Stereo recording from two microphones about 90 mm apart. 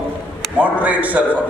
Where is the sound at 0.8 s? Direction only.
15° right (ahead or behind).